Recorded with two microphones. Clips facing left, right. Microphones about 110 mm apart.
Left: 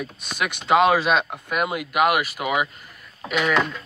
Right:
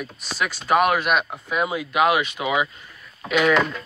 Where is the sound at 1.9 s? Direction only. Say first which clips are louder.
Right 1 dB; 5° left (ahead or behind).